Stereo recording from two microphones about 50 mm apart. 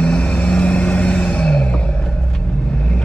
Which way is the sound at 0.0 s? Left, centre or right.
Left.